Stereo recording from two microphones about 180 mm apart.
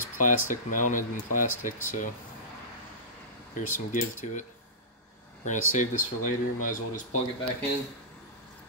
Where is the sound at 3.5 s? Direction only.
45° left (ahead or behind).